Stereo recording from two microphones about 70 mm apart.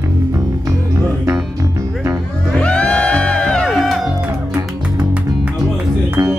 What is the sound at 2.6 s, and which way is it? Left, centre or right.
Music, centre.